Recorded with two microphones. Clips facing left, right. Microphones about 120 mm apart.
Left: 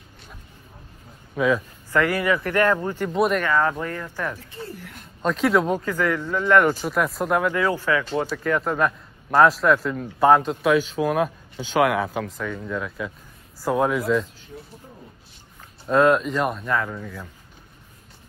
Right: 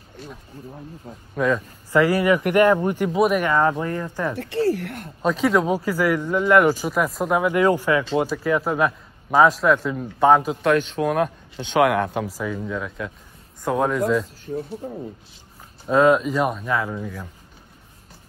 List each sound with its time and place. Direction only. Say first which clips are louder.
1.3 s a man's voice: even; centre (ahead or behind)
1.9 s speech: right 4 dB; 15° right (ahead or behind)
3.1 s a man's voice: right 1 dB; 5° right (ahead or behind)
3.4 s speech: right 2 dB; 20° right (ahead or behind)
4.4 s speech: right 15 dB; 80° right; by 5.1 s 60° right (ahead or behind)
5.2 s speech: right 1 dB; centre (ahead or behind)
7.5 s a man's voice: right 4 dB; 15° right (ahead or behind); by 14.2 s centre (ahead or behind)
14.2 s speech: right 11 dB; 45° right (ahead or behind)
15.9 s a man's voice: right 1 dB; centre (ahead or behind)